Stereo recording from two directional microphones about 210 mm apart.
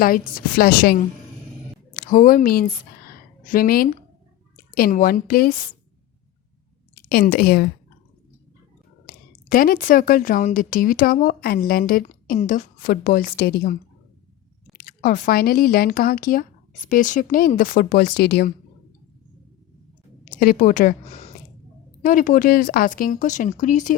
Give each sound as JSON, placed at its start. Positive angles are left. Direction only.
{"t": 0.0, "sound": "a woman's voice", "side_deg": 45}
{"t": 7.1, "sound": "a woman's voice", "side_deg": 45}
{"t": 9.0, "sound": "a woman's voice", "side_deg": 45}
{"t": 14.8, "sound": "a woman's voice", "side_deg": 45}
{"t": 20.3, "sound": "speech", "side_deg": 40}